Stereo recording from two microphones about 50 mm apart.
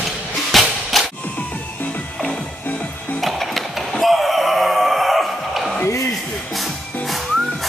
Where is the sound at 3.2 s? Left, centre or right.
Centre.